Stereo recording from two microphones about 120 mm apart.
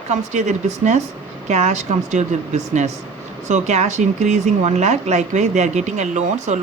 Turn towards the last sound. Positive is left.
turn(degrees=-75)  # may be behind; listen again after turning